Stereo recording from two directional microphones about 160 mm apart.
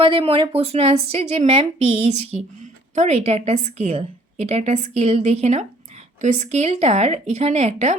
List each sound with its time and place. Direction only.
0.0 s a woman's voice: 35° right (ahead or behind)